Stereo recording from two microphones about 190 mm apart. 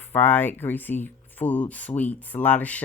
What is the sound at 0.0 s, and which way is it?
Speech, 10° left (ahead or behind).